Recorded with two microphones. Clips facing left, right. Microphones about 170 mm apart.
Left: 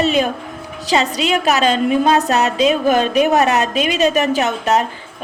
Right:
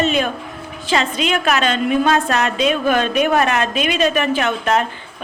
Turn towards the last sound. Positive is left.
turn(degrees=40)  # may be behind; listen again after turning